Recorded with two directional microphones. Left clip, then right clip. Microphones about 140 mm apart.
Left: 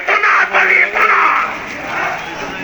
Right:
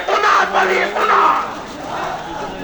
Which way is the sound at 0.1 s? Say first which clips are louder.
Left 2 dB; 20° right (ahead or behind).